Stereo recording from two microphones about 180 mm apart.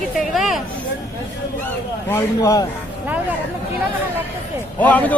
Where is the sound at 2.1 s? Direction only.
15° left (ahead or behind).